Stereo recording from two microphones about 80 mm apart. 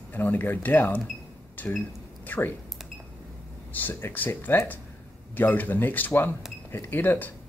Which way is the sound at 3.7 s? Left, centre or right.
Left.